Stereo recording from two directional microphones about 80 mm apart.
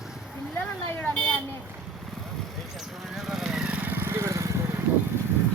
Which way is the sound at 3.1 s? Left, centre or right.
Centre.